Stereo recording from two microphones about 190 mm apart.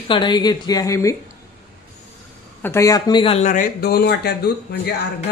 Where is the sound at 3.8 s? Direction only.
60° left (ahead or behind).